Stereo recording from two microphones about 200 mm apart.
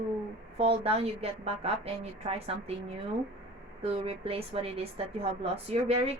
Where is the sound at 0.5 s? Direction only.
30° right (ahead or behind).